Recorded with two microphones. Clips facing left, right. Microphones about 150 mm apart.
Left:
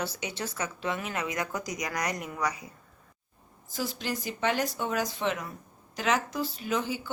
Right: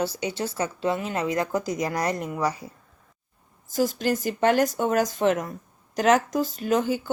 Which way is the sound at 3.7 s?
45° right (ahead or behind).